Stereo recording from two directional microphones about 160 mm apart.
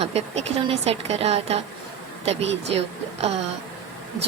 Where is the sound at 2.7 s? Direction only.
40° right (ahead or behind).